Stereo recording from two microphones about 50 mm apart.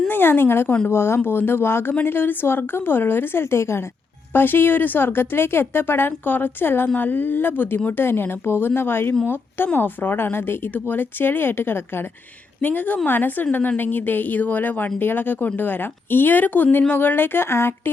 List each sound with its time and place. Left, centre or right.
0.1 s a woman's voice: left
4.3 s a woman's voice: left
12.6 s a woman's voice: left